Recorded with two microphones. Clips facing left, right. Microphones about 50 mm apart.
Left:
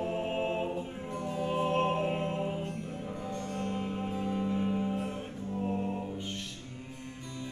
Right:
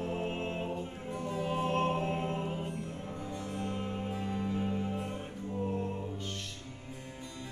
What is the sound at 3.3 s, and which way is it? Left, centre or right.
Music, centre.